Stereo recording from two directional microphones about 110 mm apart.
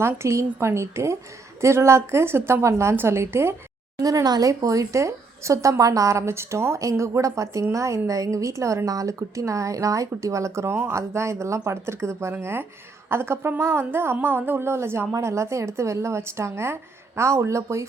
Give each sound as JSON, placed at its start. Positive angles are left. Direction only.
{"t": 0.0, "sound": "speech", "side_deg": -25}
{"t": 3.9, "sound": "speech", "side_deg": -35}